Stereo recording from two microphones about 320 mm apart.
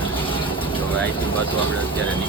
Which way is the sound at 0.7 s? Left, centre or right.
Centre.